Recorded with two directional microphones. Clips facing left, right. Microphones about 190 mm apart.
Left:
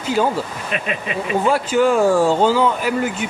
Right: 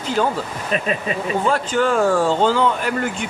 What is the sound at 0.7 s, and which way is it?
Speech, 35° right (ahead or behind).